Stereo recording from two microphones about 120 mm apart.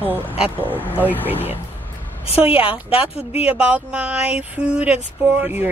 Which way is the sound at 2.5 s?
10° right (ahead or behind).